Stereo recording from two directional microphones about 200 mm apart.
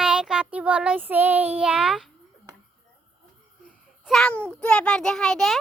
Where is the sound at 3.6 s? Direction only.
Centre (ahead or behind).